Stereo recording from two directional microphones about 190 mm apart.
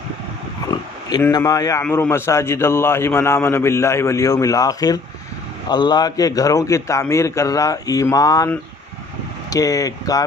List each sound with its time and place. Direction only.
0.7 s a man's voice: 20° left (ahead or behind)
9.5 s speech: 20° left (ahead or behind)